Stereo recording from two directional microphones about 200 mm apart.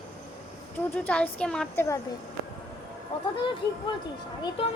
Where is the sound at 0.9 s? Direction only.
5° left (ahead or behind).